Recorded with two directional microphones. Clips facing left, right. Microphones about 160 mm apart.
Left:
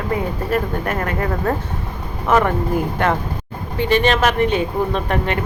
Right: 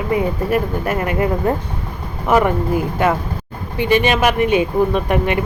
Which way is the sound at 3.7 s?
15° right (ahead or behind).